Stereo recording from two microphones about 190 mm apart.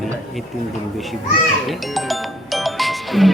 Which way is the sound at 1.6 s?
Centre (ahead or behind).